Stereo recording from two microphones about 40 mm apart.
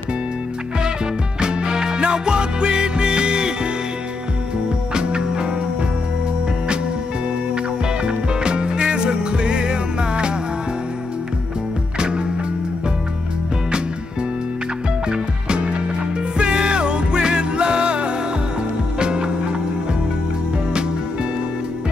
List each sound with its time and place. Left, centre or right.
1.4 s music: centre
4.9 s music: right
7.5 s music: right
12.0 s music: right
15.0 s music: right